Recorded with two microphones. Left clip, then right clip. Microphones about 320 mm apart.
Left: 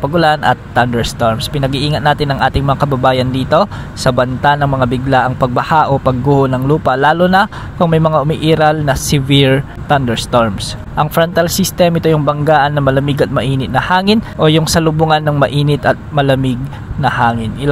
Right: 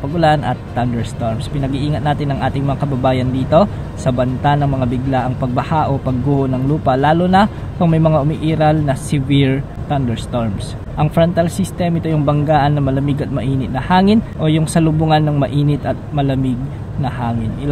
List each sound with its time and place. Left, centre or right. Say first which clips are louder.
0.1 s speech: left 3 dB; left